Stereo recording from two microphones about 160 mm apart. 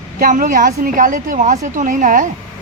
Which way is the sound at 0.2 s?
55° right (ahead or behind).